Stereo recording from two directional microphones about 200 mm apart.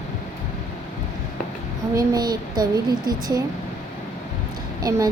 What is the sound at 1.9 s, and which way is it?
Speech, 20° right (ahead or behind).